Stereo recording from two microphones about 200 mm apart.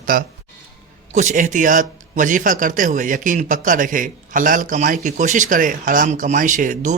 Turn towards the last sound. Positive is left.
turn(degrees=-40)  # may be behind; listen again after turning